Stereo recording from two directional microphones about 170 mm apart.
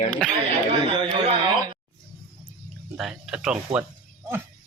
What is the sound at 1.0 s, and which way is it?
Speech, 30° right (ahead or behind).